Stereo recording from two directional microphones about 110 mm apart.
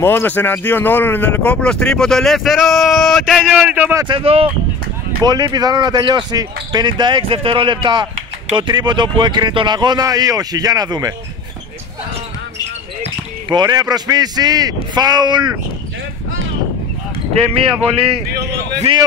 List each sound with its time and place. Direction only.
0.0 s speech: 20° left (ahead or behind); by 3.9 s 15° right (ahead or behind)
4.1 s speech: 55° right (ahead or behind)
5.2 s speech: 35° right (ahead or behind)
13.5 s speech: 40° right (ahead or behind)